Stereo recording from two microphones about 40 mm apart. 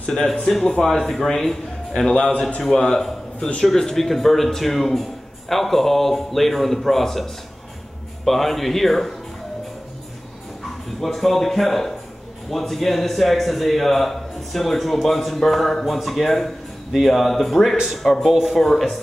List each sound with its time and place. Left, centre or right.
0.5 s a man's voice: centre
8.3 s speech: centre
11.0 s speech: centre
18.2 s speech: centre